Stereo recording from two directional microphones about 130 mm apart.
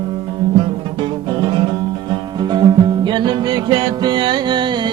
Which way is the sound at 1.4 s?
35° right (ahead or behind).